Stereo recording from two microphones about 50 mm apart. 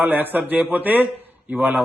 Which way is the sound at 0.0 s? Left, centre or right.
Right.